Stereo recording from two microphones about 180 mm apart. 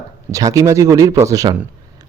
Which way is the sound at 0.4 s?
15° right (ahead or behind).